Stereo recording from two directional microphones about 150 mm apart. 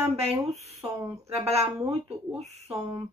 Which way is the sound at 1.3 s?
45° right (ahead or behind).